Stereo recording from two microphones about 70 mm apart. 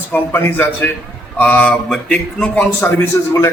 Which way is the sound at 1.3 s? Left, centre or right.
Centre.